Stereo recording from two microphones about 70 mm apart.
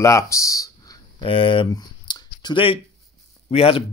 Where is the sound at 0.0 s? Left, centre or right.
Left.